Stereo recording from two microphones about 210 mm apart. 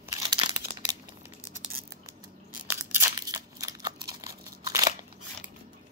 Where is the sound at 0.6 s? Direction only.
45° right (ahead or behind).